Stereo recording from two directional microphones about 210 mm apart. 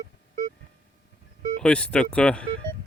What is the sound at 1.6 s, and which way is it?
Speech, 5° left (ahead or behind).